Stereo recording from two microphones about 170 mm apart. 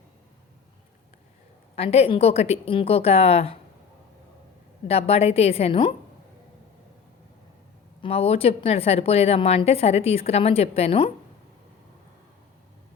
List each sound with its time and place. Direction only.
1.7 s a woman's voice: 35° left (ahead or behind)
4.9 s a woman's voice: 35° left (ahead or behind)
8.0 s a woman's voice: 35° left (ahead or behind)